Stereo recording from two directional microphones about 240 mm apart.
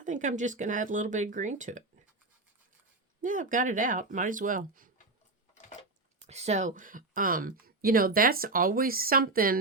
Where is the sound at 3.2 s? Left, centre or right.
Right.